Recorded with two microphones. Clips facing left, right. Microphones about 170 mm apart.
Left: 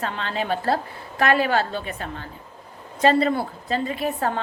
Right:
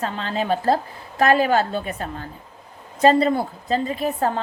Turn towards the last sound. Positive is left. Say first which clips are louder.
# right 2 dB
turn(degrees=-40)  # may be behind; listen again after turning